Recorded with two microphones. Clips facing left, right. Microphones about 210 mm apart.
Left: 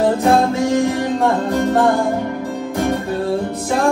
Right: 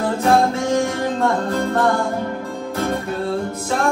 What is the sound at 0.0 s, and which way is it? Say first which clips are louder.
Music: left 2 dB; 20° left (ahead or behind).